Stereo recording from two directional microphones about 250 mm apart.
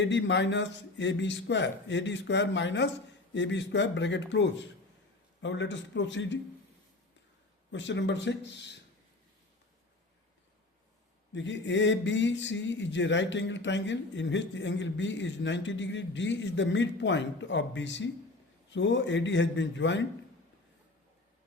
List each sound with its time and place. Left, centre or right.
0.0 s speech: left
7.7 s speech: left
11.3 s speech: left